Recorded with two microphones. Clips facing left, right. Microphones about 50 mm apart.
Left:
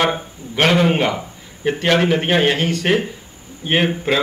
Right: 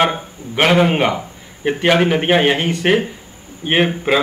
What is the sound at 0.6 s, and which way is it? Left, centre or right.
A man's voice, centre.